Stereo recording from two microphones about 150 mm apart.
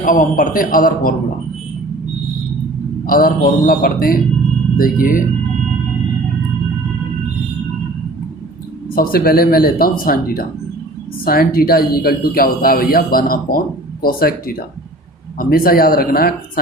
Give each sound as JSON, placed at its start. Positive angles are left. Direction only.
{"t": 0.0, "sound": "a man's voice", "side_deg": 65}
{"t": 3.1, "sound": "speech", "side_deg": 70}
{"t": 9.0, "sound": "speech", "side_deg": 85}